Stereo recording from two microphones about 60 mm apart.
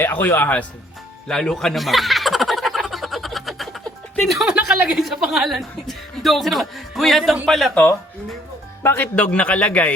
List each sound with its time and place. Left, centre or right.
0.0 s a man's voice: left
1.3 s snicker: centre
4.3 s speech: centre
8.8 s speech: left
9.1 s speech: left